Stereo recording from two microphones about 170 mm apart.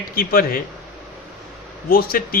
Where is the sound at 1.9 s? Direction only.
60° left (ahead or behind).